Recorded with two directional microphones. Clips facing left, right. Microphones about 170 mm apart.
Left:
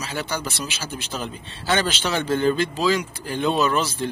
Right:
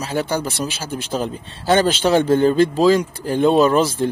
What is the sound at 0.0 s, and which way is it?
Speech, 45° right (ahead or behind).